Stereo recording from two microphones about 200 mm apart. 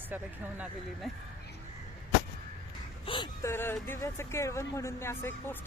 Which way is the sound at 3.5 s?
10° left (ahead or behind).